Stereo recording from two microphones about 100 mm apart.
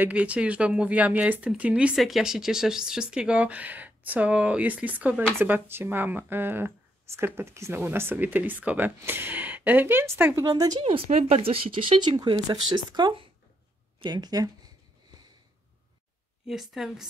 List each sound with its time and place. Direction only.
0.0 s speech: 15° right (ahead or behind)
2.0 s speech: centre (ahead or behind); by 10.4 s 25° right (ahead or behind)
10.4 s speech: 40° right (ahead or behind)
10.8 s speech: 80° right; by 14.5 s 40° right (ahead or behind)
16.4 s speech: 5° right (ahead or behind)